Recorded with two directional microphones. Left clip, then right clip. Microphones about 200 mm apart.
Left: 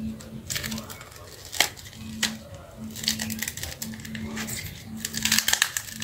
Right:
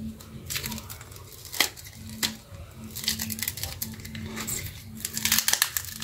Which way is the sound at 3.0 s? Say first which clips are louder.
Left 2 dB; centre (ahead or behind).